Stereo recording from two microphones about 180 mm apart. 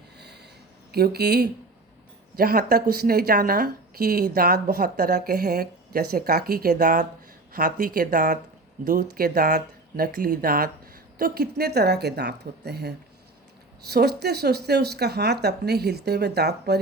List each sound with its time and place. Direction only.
0.9 s speech: 60° right (ahead or behind)